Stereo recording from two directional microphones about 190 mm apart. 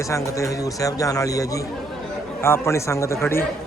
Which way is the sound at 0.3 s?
15° left (ahead or behind).